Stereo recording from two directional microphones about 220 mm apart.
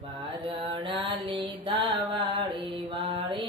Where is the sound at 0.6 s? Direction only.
20° right (ahead or behind).